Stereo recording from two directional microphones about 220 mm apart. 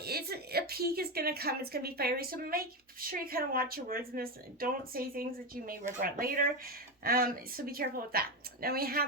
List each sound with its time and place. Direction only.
0.0 s a woman's voice: 45° right (ahead or behind)